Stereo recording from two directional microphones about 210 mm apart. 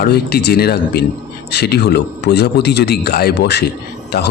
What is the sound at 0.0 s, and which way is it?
Speech, 50° left (ahead or behind).